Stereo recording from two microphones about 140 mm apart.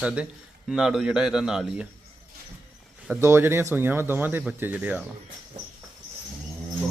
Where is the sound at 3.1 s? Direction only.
20° right (ahead or behind).